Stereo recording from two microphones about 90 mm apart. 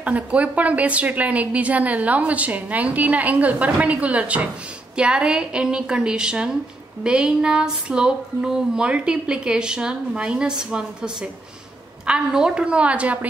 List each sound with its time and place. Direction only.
0.0 s a woman's voice: 15° right (ahead or behind)
12.1 s a woman's voice: 10° right (ahead or behind)